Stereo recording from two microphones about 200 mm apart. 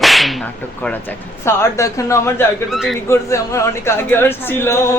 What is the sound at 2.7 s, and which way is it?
Speech, centre (ahead or behind).